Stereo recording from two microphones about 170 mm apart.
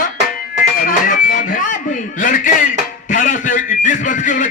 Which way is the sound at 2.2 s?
50° left (ahead or behind).